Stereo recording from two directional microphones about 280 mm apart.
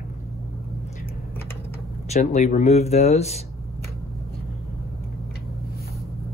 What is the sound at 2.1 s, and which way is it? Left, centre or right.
Speech, left.